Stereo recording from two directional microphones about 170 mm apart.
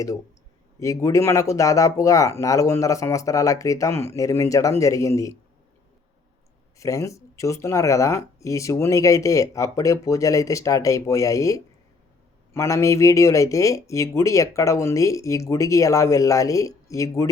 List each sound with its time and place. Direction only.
0.8 s speech: 20° left (ahead or behind)
6.7 s speech: 20° left (ahead or behind)